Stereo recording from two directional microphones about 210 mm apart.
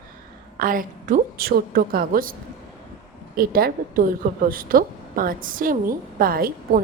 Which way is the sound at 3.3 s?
45° right (ahead or behind).